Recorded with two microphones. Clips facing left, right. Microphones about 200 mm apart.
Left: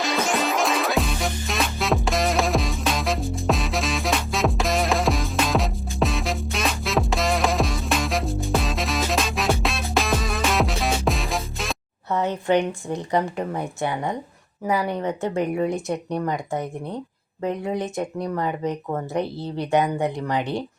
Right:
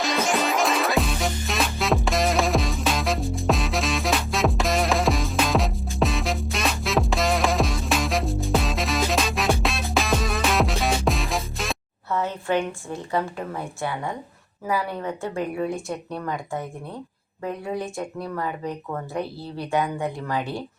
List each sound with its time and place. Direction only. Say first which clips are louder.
0.0 s music: even; centre (ahead or behind)
12.1 s speech: left 3 dB; 20° left (ahead or behind)